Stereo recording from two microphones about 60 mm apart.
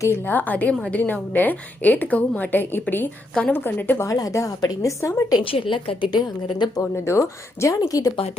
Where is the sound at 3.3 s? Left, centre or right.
Centre.